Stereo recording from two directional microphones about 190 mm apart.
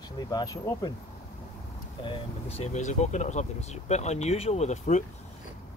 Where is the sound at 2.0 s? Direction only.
30° left (ahead or behind).